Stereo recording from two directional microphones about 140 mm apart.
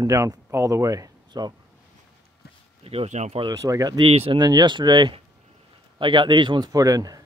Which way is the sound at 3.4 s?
25° right (ahead or behind).